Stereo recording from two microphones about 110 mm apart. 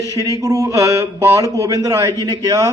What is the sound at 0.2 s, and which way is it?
Speech, 30° right (ahead or behind).